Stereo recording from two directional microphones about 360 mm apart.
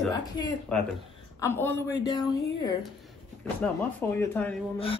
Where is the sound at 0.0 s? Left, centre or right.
Centre.